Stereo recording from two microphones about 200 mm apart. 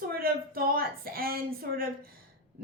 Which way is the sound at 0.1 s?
45° right (ahead or behind).